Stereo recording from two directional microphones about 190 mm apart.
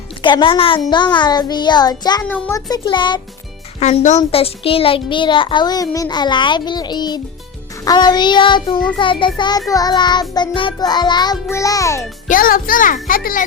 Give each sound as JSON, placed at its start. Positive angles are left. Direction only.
{"t": 0.2, "sound": "a child's voice", "side_deg": 25}
{"t": 2.3, "sound": "a child's voice", "side_deg": 10}
{"t": 2.6, "sound": "a child's voice", "side_deg": 20}
{"t": 3.8, "sound": "a child's voice", "side_deg": 35}
{"t": 12.3, "sound": "a child's voice", "side_deg": 45}